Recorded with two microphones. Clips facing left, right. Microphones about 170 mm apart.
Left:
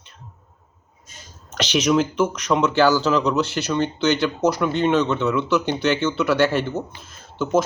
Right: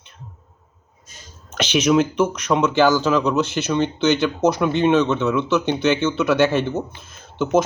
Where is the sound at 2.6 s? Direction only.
20° right (ahead or behind).